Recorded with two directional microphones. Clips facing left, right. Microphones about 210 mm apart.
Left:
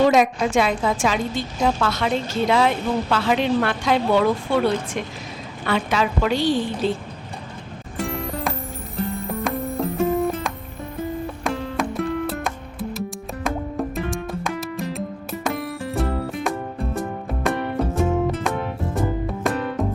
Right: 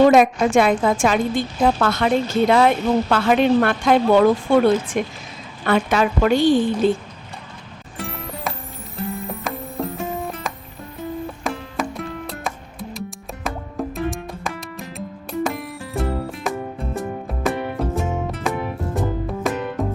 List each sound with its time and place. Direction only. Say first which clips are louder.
0.1 s a woman's voice: right 4 dB; 55° right (ahead or behind)
7.9 s music: left 5 dB; centre (ahead or behind)